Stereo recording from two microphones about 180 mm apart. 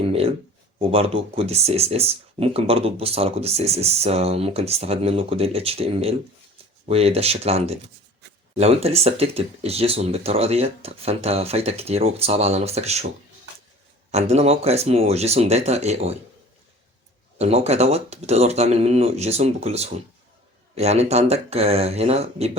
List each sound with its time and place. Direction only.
0.0 s a sound: 35° right (ahead or behind)
0.8 s speech: 30° right (ahead or behind)
14.1 s speech: 40° right (ahead or behind)
17.3 s speech: 35° right (ahead or behind)